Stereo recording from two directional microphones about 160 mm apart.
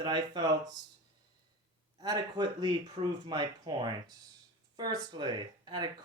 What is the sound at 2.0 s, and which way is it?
Speech, 25° right (ahead or behind).